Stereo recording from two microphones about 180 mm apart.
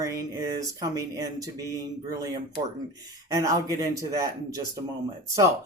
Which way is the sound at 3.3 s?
20° right (ahead or behind).